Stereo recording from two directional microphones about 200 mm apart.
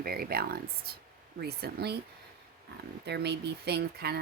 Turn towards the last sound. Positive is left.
turn(degrees=-55)  # may be behind; listen again after turning